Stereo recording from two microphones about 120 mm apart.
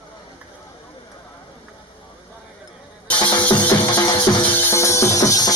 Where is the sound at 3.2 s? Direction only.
40° left (ahead or behind).